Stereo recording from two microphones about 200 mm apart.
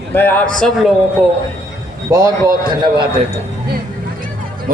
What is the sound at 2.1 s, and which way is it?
Speech, 15° right (ahead or behind).